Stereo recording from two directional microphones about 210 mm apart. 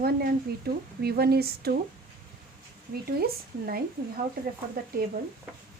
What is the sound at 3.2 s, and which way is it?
Speech, 45° right (ahead or behind).